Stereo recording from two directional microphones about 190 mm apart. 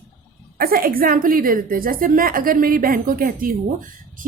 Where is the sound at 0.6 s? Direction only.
50° right (ahead or behind).